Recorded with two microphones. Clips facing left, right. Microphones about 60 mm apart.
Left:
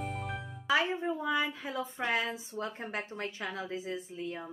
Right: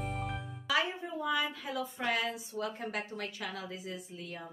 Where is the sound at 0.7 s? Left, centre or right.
Left.